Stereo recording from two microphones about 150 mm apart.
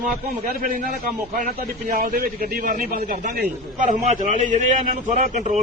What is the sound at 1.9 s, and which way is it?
A man's voice, 65° right (ahead or behind).